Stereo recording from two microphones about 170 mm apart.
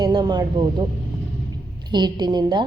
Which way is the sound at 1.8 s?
25° right (ahead or behind).